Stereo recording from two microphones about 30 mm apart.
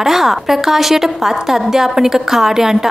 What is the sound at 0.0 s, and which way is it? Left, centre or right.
A woman's voice, centre.